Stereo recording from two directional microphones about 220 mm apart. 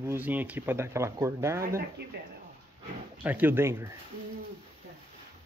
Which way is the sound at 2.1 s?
45° right (ahead or behind).